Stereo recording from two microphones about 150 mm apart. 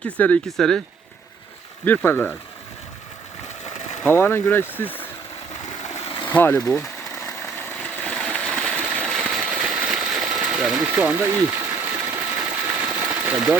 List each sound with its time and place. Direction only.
0.0 s speech: 10° left (ahead or behind)
1.8 s speech: 10° left (ahead or behind)
4.0 s speech: 15° left (ahead or behind)
5.9 s vehicle: 40° left (ahead or behind)
6.2 s speech: 10° left (ahead or behind)
8.0 s a sound: 10° left (ahead or behind); by 13.6 s 10° right (ahead or behind)